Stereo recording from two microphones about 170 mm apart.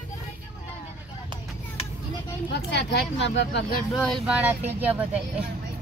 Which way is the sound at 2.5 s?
85° left.